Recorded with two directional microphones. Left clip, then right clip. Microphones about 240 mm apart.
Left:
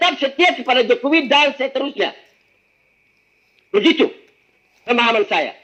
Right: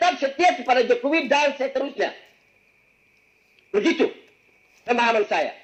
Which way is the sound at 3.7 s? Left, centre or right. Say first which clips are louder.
Left 6 dB; left.